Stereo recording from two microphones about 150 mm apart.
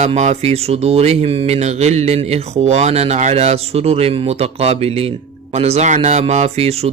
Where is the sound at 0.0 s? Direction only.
50° right (ahead or behind).